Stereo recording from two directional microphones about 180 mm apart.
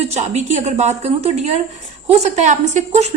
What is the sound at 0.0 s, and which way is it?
A woman's voice, 40° right (ahead or behind).